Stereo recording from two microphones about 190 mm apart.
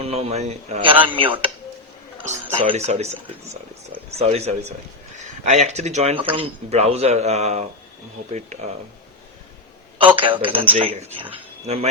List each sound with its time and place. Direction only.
0.0 s speech: 35° right (ahead or behind)
2.6 s speech: 30° right (ahead or behind)
10.2 s speech: 25° right (ahead or behind)